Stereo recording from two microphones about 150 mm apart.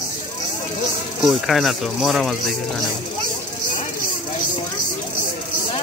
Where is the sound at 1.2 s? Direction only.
Centre (ahead or behind).